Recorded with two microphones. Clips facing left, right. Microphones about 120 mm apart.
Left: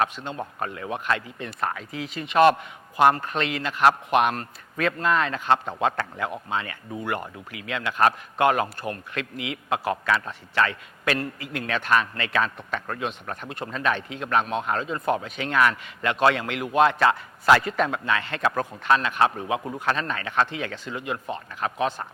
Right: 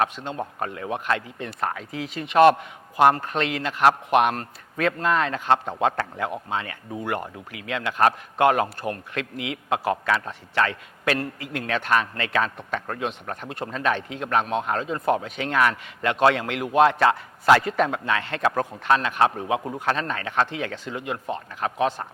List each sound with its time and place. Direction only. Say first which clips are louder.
0.3 s a man's voice: right 1 dB; 45° right (ahead or behind)